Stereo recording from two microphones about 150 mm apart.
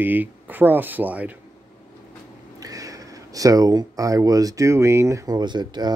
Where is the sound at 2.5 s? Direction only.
25° right (ahead or behind).